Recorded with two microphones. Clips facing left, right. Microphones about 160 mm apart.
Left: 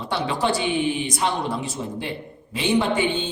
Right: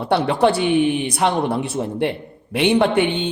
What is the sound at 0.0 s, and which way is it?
Speech, 60° right (ahead or behind).